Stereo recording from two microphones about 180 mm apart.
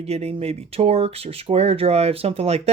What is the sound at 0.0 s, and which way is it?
Speech, 35° right (ahead or behind).